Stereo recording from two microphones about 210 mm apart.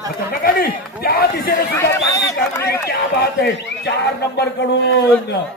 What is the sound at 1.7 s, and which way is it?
Speech, 15° left (ahead or behind).